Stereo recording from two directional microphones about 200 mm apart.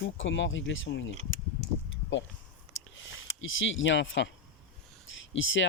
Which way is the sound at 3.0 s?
75° left (ahead or behind).